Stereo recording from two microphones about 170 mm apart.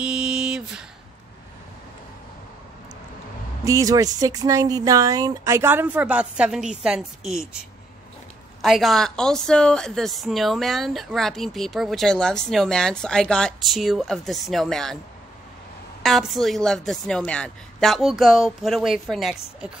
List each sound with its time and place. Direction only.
0.0 s a sound: 5° right (ahead or behind)
3.6 s speech: 20° right (ahead or behind); by 7.6 s 5° right (ahead or behind)
8.6 s a woman's voice: centre (ahead or behind)
16.0 s a woman's voice: centre (ahead or behind)